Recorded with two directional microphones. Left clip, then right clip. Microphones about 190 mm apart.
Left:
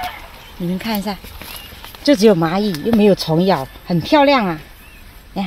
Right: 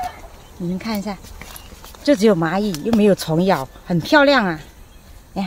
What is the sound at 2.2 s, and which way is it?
Speech, 50° left (ahead or behind).